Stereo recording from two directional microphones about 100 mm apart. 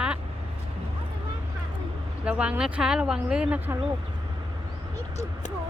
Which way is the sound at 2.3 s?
15° right (ahead or behind).